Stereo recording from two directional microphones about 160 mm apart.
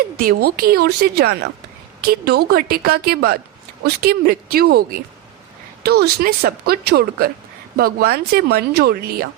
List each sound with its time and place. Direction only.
0.2 s speech: 70° right (ahead or behind); by 1.5 s 90° right
2.0 s speech: 80° right